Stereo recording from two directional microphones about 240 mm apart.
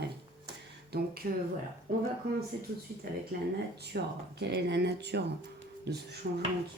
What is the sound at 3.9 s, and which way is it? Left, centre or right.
Speech, right.